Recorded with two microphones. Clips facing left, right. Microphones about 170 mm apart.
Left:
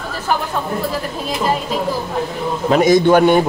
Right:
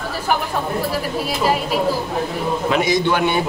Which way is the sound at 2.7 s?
45° left (ahead or behind).